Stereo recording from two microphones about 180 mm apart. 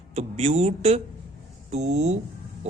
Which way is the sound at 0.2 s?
35° right (ahead or behind).